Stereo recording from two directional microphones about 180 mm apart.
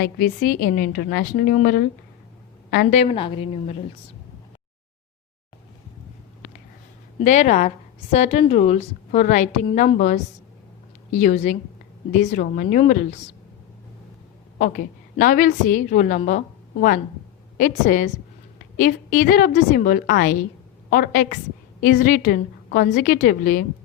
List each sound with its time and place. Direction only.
0.0 s a woman's voice: 55° left (ahead or behind)
2.9 s a woman's voice: 35° left (ahead or behind)
7.2 s a woman's voice: 40° left (ahead or behind)
15.2 s a woman's voice: 45° left (ahead or behind)
17.6 s a woman's voice: 45° left (ahead or behind)